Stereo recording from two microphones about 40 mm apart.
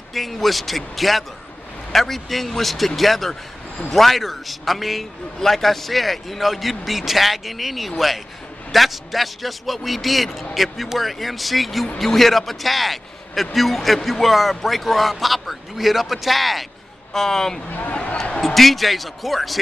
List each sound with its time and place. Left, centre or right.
0.1 s a man's voice: centre
17.1 s speech: centre
17.6 s speech: left
18.4 s a man's voice: centre